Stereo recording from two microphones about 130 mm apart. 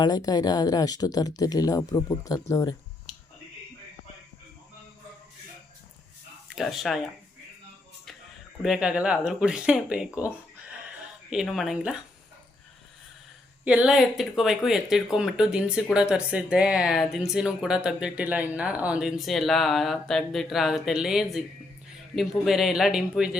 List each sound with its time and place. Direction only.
0.0 s speech: 30° left (ahead or behind)
3.1 s a sound: centre (ahead or behind)
6.6 s speech: centre (ahead or behind)
8.6 s speech: 5° right (ahead or behind)
11.4 s speech: centre (ahead or behind)
13.7 s speech: 5° right (ahead or behind)